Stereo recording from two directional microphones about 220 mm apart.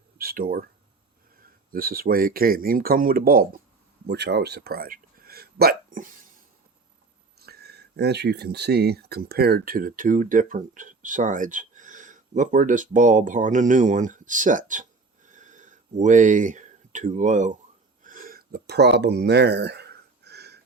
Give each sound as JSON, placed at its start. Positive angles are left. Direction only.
{"t": 0.2, "sound": "speech", "side_deg": -40}
{"t": 7.3, "sound": "speech", "side_deg": -45}
{"t": 15.3, "sound": "a sound", "side_deg": -35}